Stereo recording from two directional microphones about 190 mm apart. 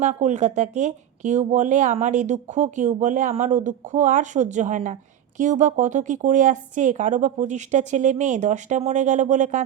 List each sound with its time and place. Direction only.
0.0 s speech: 40° right (ahead or behind)